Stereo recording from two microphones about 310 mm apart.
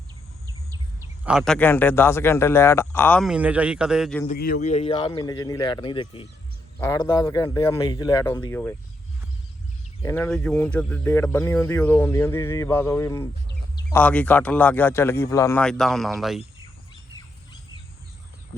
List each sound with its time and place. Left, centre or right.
0.4 s speech: centre
4.3 s speech: left; by 8.7 s centre
10.0 s a man's voice: centre